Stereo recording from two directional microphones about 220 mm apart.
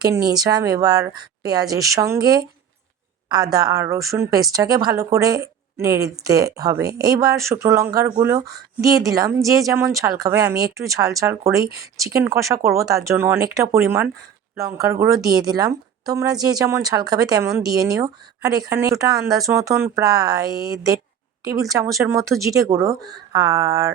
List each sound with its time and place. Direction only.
0.3 s speech: 15° right (ahead or behind)